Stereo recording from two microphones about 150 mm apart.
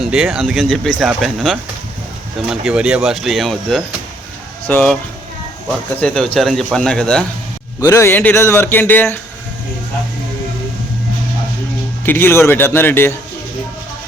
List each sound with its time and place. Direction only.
0.0 s speech: centre (ahead or behind)
6.0 s speech: 5° left (ahead or behind)
7.8 s speech: 20° left (ahead or behind)
12.0 s speech: 15° left (ahead or behind)